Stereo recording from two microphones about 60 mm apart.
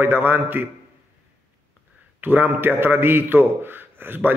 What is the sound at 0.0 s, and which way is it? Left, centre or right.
Speech, right.